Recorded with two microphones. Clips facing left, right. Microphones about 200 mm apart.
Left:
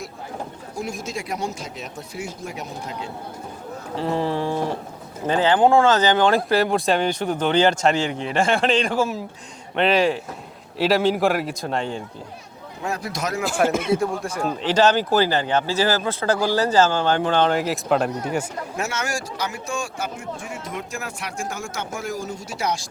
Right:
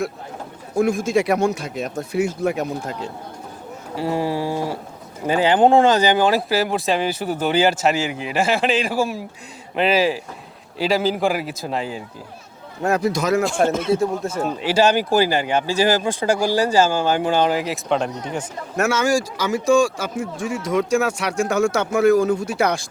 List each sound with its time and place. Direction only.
0.8 s speech: 55° right (ahead or behind)
1.1 s speech: 70° right (ahead or behind)
3.9 s a man's voice: 10° right (ahead or behind)
13.6 s speech: 30° right (ahead or behind)
14.4 s speech: 10° right (ahead or behind); by 18.4 s 5° left (ahead or behind)
18.9 s speech: 90° right; by 22.9 s 55° right (ahead or behind)